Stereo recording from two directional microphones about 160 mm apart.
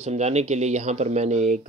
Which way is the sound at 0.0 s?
45° right (ahead or behind).